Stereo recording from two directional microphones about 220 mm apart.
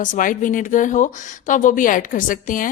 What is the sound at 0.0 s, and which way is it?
A woman's voice, 40° left (ahead or behind).